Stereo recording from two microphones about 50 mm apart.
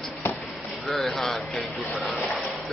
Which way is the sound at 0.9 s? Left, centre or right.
Centre.